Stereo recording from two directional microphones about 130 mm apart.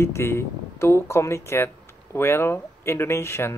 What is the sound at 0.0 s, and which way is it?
Speech, 20° left (ahead or behind).